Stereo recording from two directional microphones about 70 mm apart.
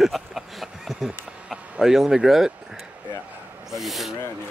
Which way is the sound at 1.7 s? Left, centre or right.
Centre.